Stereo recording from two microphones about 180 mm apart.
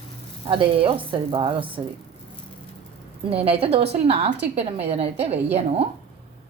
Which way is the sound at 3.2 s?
30° right (ahead or behind).